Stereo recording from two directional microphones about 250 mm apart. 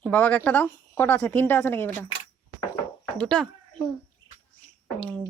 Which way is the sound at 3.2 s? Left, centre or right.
Centre.